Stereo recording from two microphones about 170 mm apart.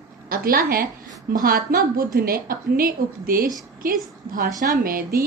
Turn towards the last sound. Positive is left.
turn(degrees=-60)  # may be behind; listen again after turning